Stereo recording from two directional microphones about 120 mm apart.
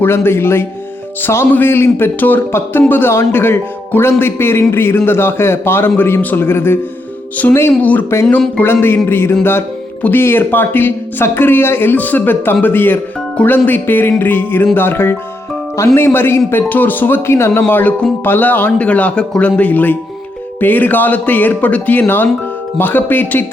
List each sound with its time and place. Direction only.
0.0 s a man's voice: 20° left (ahead or behind)